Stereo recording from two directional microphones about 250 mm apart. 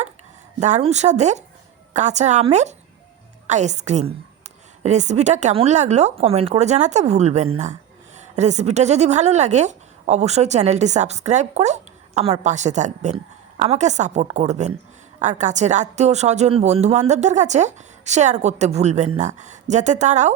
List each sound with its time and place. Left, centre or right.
0.6 s a woman's voice: right